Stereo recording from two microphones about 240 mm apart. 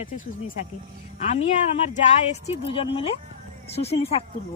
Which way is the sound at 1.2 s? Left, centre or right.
Left.